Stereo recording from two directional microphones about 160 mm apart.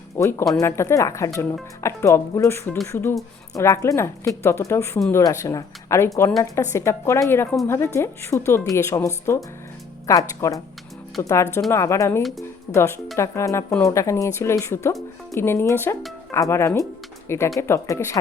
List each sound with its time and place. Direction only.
0.2 s speech: 15° left (ahead or behind)